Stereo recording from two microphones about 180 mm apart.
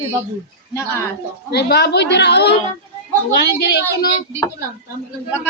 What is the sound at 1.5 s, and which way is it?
A woman's voice, 65° left (ahead or behind).